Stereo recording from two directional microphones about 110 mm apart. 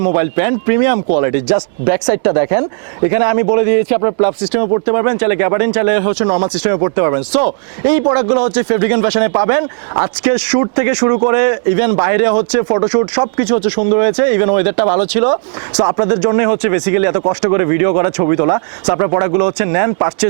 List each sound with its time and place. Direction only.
0.0 s speech: 25° right (ahead or behind)